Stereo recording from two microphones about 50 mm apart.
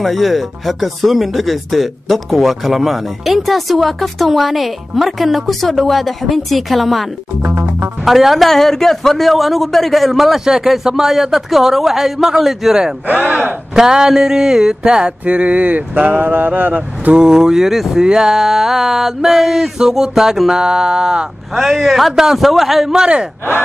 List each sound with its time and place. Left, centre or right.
0.0 s speech: centre
7.4 s music: right
8.0 s speech: centre
8.5 s speech: centre
10.4 s a sound: centre
13.0 s mantra: right
13.7 s mantra: centre; by 17.1 s right
17.1 s a sound: centre
18.0 s a sound: centre
21.5 s speech: centre